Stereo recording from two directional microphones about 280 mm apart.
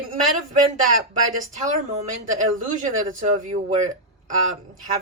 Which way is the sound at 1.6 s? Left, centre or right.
Right.